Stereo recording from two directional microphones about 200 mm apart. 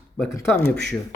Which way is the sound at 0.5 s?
10° left (ahead or behind).